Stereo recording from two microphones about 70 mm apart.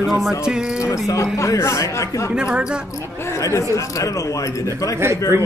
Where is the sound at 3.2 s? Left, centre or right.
Left.